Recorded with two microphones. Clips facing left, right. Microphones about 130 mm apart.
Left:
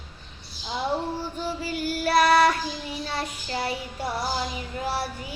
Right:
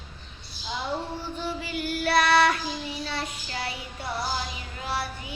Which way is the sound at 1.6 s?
40° left (ahead or behind).